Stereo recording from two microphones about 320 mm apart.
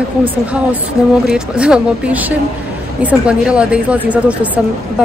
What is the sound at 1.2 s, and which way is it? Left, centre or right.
A woman's voice, centre.